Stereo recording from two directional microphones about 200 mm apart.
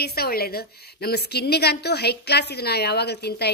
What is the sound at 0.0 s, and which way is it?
A woman's voice, 50° left (ahead or behind).